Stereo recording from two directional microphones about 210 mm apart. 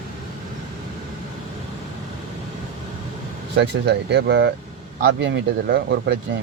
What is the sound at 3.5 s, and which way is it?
Speech, 55° right (ahead or behind).